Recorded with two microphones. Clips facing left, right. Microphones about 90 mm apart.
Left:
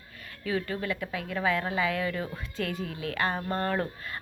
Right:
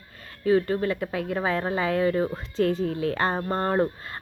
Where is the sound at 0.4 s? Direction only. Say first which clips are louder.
Right 9 dB; 35° right (ahead or behind).